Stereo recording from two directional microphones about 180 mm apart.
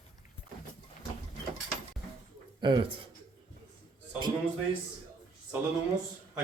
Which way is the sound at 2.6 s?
25° right (ahead or behind).